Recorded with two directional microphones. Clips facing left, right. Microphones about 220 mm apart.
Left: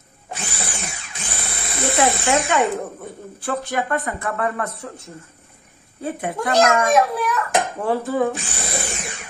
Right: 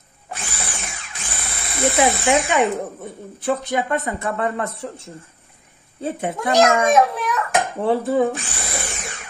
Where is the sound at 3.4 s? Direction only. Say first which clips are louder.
Right 3 dB; 15° right (ahead or behind).